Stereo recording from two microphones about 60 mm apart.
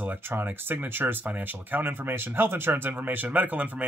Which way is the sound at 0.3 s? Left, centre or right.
Right.